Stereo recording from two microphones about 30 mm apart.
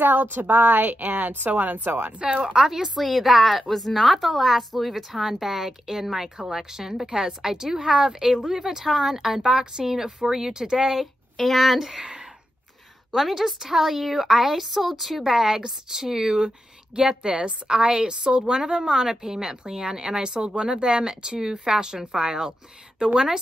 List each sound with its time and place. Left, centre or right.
0.0 s a woman's voice: right
1.6 s speech: right
2.1 s speech: right
2.4 s a woman's voice: centre
3.0 s a woman's voice: centre; by 10.9 s right
11.3 s speech: centre
11.9 s a woman's voice: right
13.3 s a woman's voice: centre
15.4 s a woman's voice: centre
16.3 s a woman's voice: right